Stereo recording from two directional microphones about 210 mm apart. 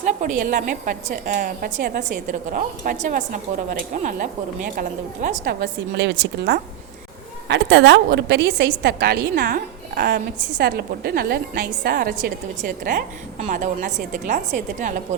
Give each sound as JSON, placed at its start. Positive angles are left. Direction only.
{"t": 0.0, "sound": "a woman's voice", "side_deg": -35}